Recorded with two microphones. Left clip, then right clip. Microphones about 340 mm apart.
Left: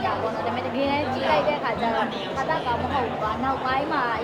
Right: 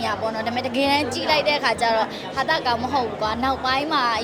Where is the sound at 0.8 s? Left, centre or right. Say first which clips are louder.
Right 4 dB; right.